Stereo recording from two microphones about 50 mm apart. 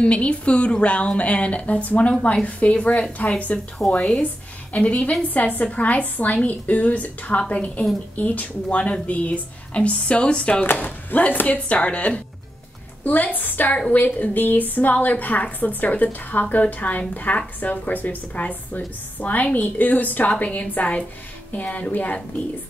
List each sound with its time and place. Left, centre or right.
0.0 s speech: left
3.8 s speech: centre
4.7 s a woman's voice: left
10.6 s a woman's voice: left